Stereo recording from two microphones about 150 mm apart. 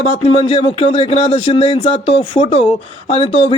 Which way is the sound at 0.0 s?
40° left (ahead or behind).